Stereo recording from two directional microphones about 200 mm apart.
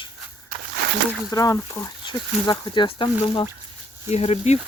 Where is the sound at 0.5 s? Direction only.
45° right (ahead or behind).